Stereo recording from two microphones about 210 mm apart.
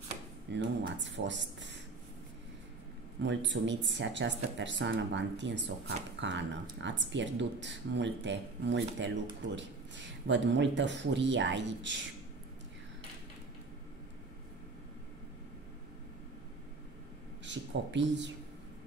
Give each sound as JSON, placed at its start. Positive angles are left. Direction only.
{"t": 0.5, "sound": "speech", "side_deg": -55}
{"t": 3.2, "sound": "speech", "side_deg": -55}
{"t": 17.5, "sound": "speech", "side_deg": -60}